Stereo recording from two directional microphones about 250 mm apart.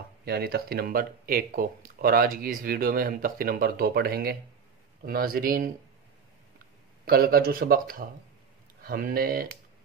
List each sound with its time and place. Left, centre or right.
0.2 s speech: right
7.1 s speech: right